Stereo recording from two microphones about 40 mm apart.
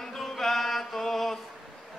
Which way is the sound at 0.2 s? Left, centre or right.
Centre.